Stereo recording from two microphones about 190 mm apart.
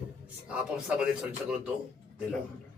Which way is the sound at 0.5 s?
5° right (ahead or behind).